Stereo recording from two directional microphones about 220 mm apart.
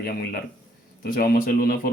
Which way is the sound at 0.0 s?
45° left (ahead or behind).